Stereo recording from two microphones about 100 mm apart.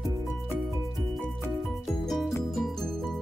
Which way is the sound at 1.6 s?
Centre (ahead or behind).